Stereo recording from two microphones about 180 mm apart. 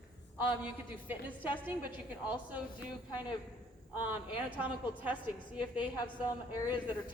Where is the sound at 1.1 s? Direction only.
10° right (ahead or behind).